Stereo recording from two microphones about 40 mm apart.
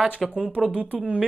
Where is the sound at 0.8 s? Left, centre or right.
Right.